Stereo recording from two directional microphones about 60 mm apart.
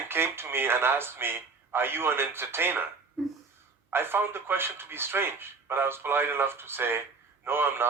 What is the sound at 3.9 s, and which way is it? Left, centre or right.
Speech, right.